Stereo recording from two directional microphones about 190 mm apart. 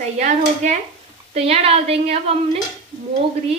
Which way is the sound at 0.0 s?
35° right (ahead or behind).